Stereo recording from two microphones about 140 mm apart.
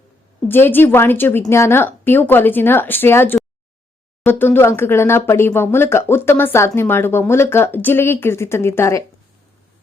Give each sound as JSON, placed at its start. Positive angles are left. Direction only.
{"t": 0.4, "sound": "speech", "side_deg": 15}